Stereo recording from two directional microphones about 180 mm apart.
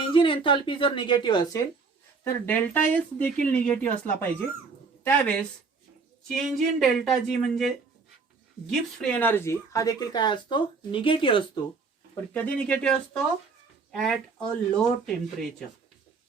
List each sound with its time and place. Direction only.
0.1 s speech: 25° left (ahead or behind)
2.2 s speech: 10° left (ahead or behind)
9.0 s speech: 5° left (ahead or behind); by 11.4 s 30° left (ahead or behind)
12.3 s speech: 10° left (ahead or behind)